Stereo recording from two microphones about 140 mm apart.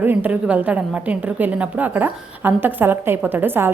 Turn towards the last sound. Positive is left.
turn(degrees=-15)  # may be behind; listen again after turning